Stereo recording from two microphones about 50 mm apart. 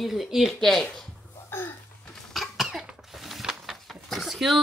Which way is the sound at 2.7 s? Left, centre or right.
Centre.